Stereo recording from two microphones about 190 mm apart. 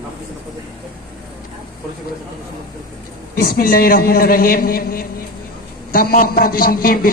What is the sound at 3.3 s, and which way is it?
Speech, 50° left (ahead or behind).